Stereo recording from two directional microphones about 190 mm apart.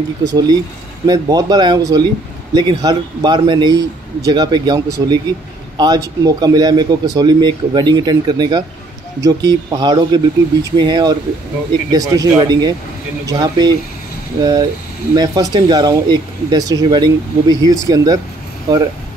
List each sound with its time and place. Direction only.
0.2 s speech: 25° right (ahead or behind)